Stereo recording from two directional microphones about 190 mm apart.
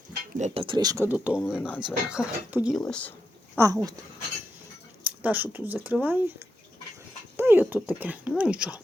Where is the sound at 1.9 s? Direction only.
5° right (ahead or behind).